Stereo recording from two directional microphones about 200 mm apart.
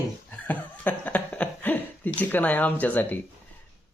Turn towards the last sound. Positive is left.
turn(degrees=10)  # may be behind; listen again after turning